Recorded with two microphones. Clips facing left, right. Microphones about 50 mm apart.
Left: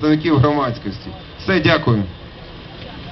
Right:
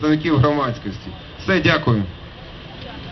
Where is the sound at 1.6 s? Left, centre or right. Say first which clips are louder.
Left 2 dB; centre.